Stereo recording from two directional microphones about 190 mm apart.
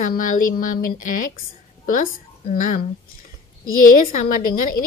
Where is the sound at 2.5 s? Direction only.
45° left (ahead or behind).